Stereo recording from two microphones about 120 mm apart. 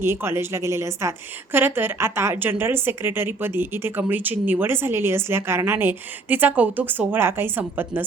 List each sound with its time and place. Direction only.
0.0 s a woman's voice: 20° right (ahead or behind)